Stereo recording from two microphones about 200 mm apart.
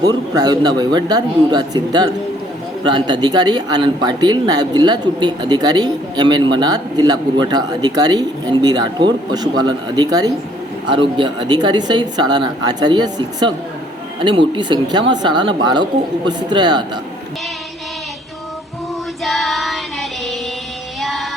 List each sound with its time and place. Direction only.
0.0 s speech: 20° right (ahead or behind)
19.2 s child singing: centre (ahead or behind)
21.0 s music: centre (ahead or behind)